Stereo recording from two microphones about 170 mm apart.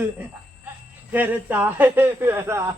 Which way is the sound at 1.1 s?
10° right (ahead or behind).